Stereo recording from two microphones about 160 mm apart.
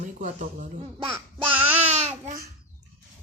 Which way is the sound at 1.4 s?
10° right (ahead or behind).